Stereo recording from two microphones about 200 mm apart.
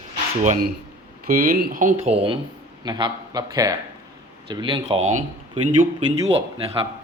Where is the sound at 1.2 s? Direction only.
45° right (ahead or behind).